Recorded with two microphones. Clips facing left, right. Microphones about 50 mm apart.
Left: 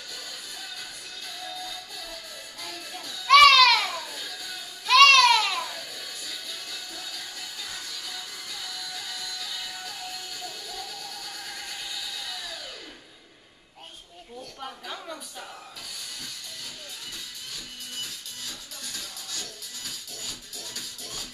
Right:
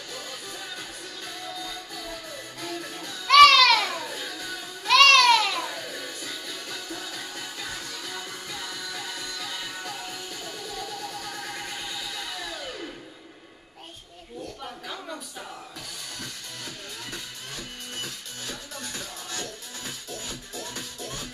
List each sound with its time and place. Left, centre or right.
2.6 s music: right
3.3 s music: centre
4.1 s music: right
4.8 s a sound: centre
5.6 s music: right
8.5 s music: right
16.6 s music: right